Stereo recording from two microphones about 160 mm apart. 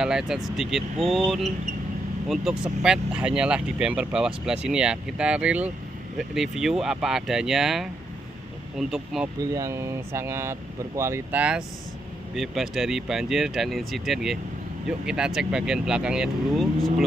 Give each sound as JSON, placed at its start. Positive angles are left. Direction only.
{"t": 0.0, "sound": "speech", "side_deg": -5}
{"t": 9.4, "sound": "speech", "side_deg": -20}